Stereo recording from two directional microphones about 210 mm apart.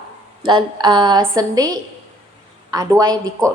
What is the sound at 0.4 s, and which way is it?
A woman's voice, 20° right (ahead or behind).